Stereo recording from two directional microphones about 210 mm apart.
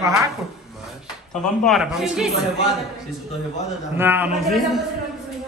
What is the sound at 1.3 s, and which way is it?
A woman's voice, centre (ahead or behind).